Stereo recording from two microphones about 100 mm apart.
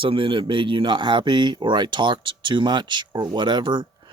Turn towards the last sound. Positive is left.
turn(degrees=-50)  # may be behind; listen again after turning